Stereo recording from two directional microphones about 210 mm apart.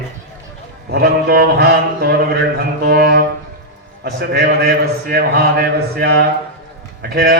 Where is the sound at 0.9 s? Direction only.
45° right (ahead or behind).